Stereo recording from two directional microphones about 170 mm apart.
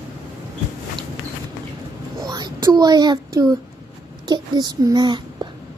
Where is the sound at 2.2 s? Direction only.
25° right (ahead or behind).